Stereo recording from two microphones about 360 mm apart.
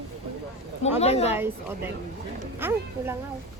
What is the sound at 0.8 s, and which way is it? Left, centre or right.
Speech, centre.